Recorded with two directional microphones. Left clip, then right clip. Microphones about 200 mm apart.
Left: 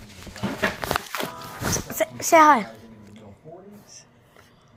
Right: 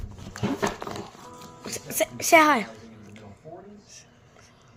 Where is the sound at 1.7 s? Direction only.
5° right (ahead or behind).